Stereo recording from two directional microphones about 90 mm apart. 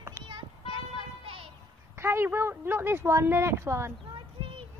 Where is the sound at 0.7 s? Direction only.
90° right.